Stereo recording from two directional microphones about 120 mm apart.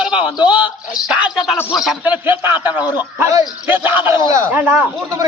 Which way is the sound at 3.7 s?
15° right (ahead or behind).